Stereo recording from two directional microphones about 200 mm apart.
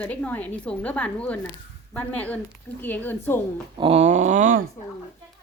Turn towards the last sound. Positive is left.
turn(degrees=-40)  # may be behind; listen again after turning